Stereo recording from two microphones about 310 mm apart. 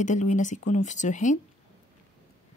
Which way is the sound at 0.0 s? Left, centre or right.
Left.